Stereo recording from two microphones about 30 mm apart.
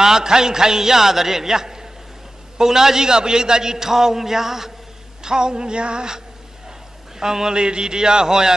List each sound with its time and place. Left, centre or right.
0.0 s a man's voice: centre
5.2 s a man's voice: right